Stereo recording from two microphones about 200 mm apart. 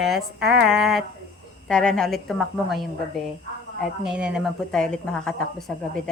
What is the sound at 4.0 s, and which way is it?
Speech, 5° right (ahead or behind).